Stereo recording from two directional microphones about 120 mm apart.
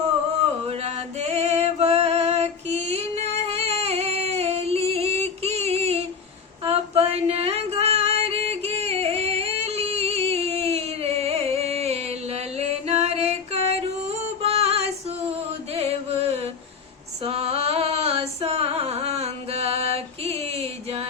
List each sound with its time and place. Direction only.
0.6 s music: 60° right (ahead or behind)
14.4 s female singing: 60° right (ahead or behind)
15.7 s chant: 60° right (ahead or behind)
17.2 s a sound: 55° right (ahead or behind)